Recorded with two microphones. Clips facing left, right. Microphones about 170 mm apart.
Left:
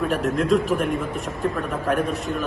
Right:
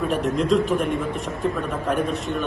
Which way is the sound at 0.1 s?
Centre (ahead or behind).